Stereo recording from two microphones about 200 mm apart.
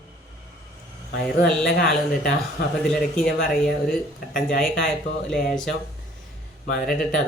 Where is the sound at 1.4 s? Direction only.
Centre (ahead or behind).